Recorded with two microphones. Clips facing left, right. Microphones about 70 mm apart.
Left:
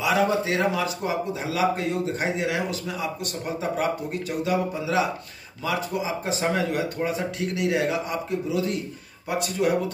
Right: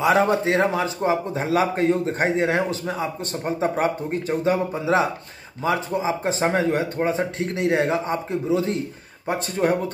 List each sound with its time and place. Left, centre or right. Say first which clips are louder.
0.0 s speech: right 4 dB; right